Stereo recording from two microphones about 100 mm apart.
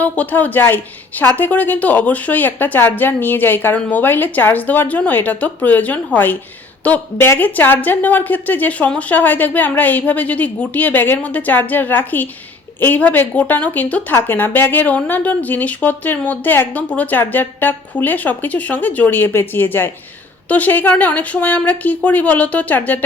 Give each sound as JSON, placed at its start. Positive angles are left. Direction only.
{"t": 0.0, "sound": "a woman's voice", "side_deg": 15}